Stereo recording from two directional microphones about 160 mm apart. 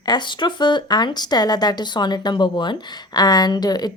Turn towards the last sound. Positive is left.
turn(degrees=25)  # may be behind; listen again after turning